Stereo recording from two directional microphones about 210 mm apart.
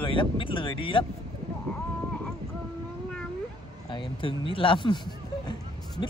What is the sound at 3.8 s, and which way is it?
Speech, 25° left (ahead or behind).